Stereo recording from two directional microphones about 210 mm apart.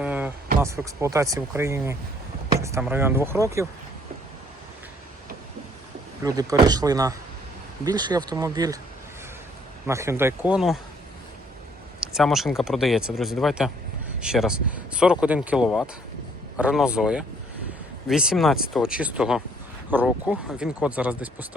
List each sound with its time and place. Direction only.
0.0 s a sound: 5° right (ahead or behind)
0.6 s speech: 15° right (ahead or behind)
6.2 s speech: 15° right (ahead or behind)
9.8 s speech: 15° right (ahead or behind)
11.9 s speech: centre (ahead or behind)